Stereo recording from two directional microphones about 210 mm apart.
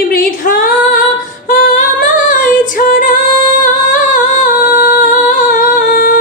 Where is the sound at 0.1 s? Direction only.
45° left (ahead or behind).